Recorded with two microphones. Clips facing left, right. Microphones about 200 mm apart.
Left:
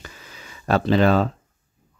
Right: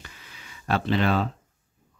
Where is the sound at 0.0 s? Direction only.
40° left (ahead or behind).